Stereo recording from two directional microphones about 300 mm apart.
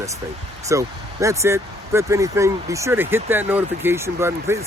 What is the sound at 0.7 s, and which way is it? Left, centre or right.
Speech, centre.